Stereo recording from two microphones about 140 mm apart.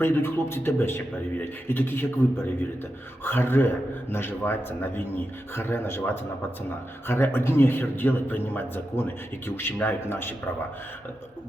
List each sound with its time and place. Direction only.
0.0 s speech: 15° left (ahead or behind)
7.1 s speech: 15° left (ahead or behind)